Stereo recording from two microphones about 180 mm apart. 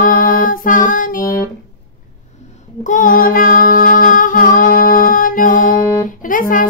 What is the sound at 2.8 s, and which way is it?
Female singing, 45° left (ahead or behind).